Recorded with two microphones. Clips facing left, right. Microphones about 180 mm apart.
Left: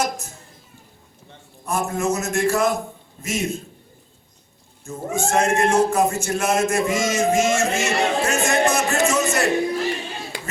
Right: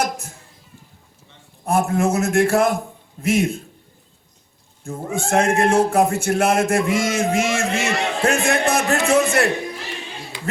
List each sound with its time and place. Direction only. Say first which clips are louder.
0.0 s a sound: right 1 dB; 55° right (ahead or behind)
1.6 s speech: right 4 dB; 55° right (ahead or behind)
4.8 s speech: left 1 dB; 55° right (ahead or behind)